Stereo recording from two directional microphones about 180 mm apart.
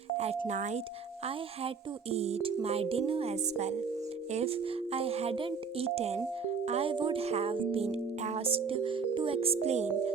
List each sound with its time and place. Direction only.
0.2 s speech: 35° right (ahead or behind)